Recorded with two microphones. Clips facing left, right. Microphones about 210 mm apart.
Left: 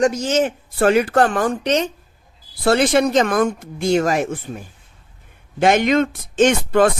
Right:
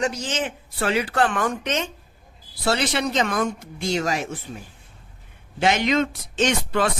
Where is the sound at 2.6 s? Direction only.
50° left (ahead or behind).